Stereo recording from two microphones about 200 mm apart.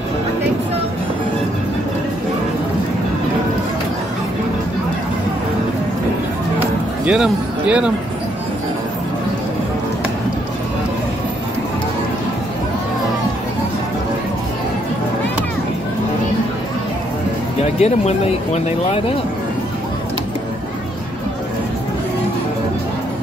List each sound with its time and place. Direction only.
7.1 s speech: 5° right (ahead or behind)
17.7 s speech: 30° left (ahead or behind)